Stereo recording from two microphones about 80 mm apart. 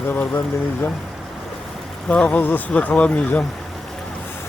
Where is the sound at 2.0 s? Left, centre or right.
Centre.